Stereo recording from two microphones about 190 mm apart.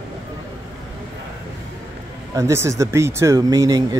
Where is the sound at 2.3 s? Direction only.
15° right (ahead or behind).